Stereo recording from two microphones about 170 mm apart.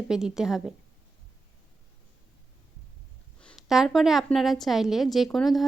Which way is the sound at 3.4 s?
Centre (ahead or behind).